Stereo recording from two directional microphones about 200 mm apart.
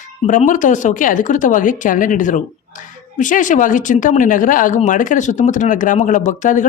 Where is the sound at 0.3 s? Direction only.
40° left (ahead or behind).